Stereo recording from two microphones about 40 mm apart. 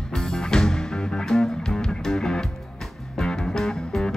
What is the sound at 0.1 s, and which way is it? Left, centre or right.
Music, centre.